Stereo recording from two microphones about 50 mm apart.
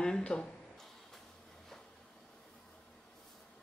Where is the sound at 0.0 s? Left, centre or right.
Centre.